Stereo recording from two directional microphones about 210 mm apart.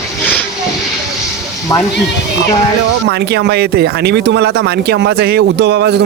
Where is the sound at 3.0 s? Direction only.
50° right (ahead or behind).